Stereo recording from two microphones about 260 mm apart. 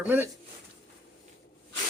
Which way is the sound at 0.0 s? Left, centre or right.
Centre.